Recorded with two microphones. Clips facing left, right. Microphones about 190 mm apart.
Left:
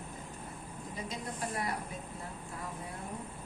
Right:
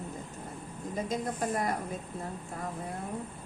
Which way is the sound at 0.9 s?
45° right (ahead or behind).